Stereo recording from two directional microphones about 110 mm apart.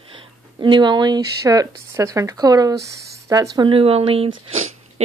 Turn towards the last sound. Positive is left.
turn(degrees=-90)